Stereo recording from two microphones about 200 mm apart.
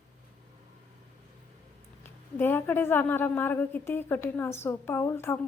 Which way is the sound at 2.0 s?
10° left (ahead or behind).